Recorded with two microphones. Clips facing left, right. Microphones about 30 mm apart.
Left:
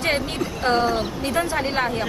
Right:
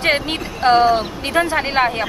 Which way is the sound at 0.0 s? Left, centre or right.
Right.